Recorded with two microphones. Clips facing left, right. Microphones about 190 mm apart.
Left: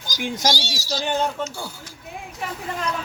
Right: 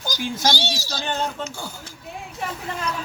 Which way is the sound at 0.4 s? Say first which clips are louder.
Right 1 dB; 60° right (ahead or behind).